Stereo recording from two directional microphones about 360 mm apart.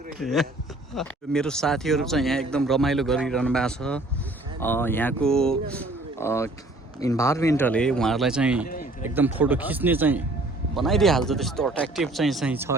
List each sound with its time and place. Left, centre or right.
0.2 s speech: centre
8.7 s a sound: left
9.0 s speech: centre